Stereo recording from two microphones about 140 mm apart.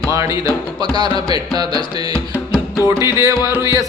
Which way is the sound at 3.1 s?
20° right (ahead or behind).